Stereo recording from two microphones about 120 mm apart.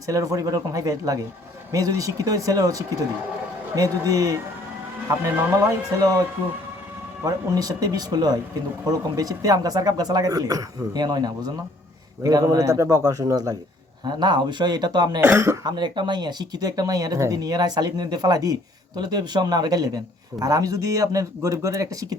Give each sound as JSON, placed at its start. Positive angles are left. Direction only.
{"t": 0.1, "sound": "speech", "side_deg": -30}
{"t": 7.3, "sound": "speech", "side_deg": -30}
{"t": 15.2, "sound": "speech", "side_deg": -20}
{"t": 15.6, "sound": "speech", "side_deg": -40}